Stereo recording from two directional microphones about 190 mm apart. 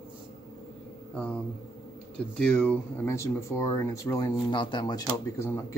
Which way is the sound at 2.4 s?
5° left (ahead or behind).